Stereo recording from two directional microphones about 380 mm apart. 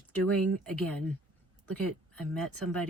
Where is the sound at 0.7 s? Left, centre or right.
Centre.